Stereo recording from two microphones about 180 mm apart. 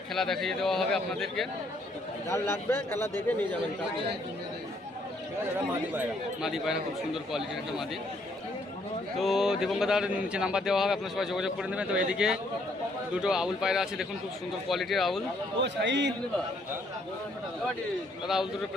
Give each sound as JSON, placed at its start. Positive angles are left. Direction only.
{"t": 0.1, "sound": "speech", "side_deg": 0}
{"t": 2.3, "sound": "a man's voice", "side_deg": 15}
{"t": 5.5, "sound": "speech", "side_deg": -10}
{"t": 9.1, "sound": "speech", "side_deg": 0}
{"t": 15.6, "sound": "a man's voice", "side_deg": -75}